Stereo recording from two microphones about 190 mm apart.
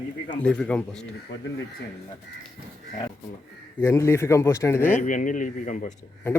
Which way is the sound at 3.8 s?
15° left (ahead or behind).